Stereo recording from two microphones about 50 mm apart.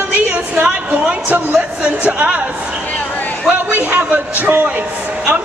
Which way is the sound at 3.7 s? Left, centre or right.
Right.